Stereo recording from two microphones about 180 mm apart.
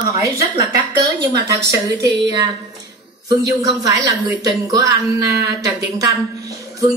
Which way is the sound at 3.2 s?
20° right (ahead or behind).